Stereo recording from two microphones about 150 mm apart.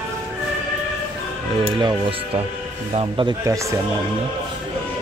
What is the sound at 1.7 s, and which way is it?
Speech, 35° right (ahead or behind).